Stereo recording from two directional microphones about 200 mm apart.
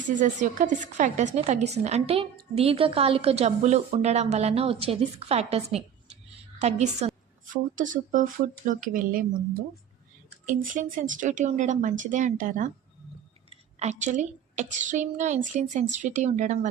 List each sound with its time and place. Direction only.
0.2 s a woman's voice: 40° right (ahead or behind)
10.4 s a woman's voice: 40° right (ahead or behind)
13.7 s a woman's voice: 35° right (ahead or behind)